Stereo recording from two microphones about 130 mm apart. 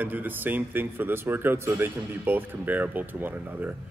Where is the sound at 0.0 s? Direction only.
15° right (ahead or behind).